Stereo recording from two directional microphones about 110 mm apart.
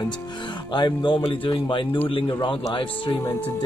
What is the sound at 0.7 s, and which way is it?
Speech, 45° left (ahead or behind).